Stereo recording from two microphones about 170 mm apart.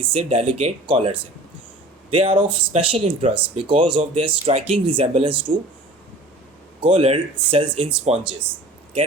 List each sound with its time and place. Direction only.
0.0 s speech: 35° right (ahead or behind)
6.8 s speech: 35° right (ahead or behind)